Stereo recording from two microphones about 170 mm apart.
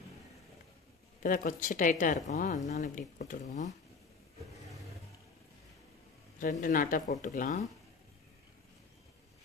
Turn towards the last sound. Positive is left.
turn(degrees=50)  # may be behind; listen again after turning